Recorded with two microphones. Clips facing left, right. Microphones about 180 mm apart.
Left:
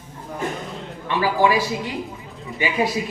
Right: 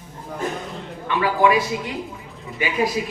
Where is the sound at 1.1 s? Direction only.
30° left (ahead or behind).